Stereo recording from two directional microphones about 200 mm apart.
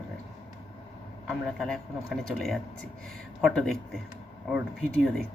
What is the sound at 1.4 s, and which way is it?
Speech, centre (ahead or behind).